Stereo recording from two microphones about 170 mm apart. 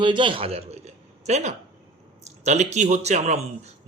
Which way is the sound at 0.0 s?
30° right (ahead or behind).